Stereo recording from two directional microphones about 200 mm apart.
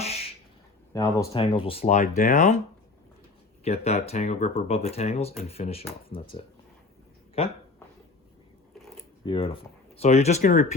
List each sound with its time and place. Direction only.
0.0 s duck: 30° left (ahead or behind)
0.9 s speech: 15° left (ahead or behind)
1.3 s speech: 25° left (ahead or behind)
3.6 s speech: 30° left (ahead or behind)
9.2 s speech: 25° left (ahead or behind)